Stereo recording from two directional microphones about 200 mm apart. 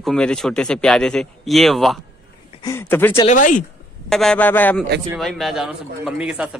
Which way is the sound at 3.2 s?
40° left (ahead or behind).